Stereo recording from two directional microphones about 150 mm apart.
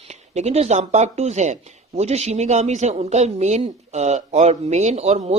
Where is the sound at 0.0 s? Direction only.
45° right (ahead or behind).